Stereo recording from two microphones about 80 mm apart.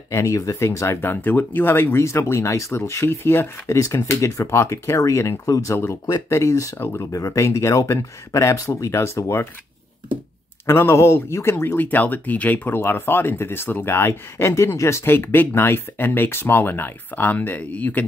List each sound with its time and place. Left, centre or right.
0.1 s speech: left
7.1 s speech: left
10.7 s speech: left